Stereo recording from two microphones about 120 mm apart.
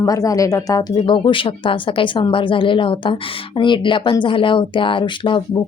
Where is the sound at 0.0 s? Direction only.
30° left (ahead or behind).